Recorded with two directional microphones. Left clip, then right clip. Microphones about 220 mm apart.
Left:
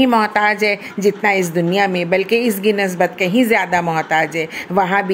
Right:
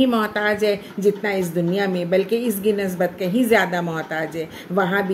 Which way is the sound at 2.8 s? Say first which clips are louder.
Left 5 dB; 20° left (ahead or behind).